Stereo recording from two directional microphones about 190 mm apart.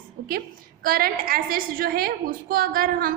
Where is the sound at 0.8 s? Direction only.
50° right (ahead or behind).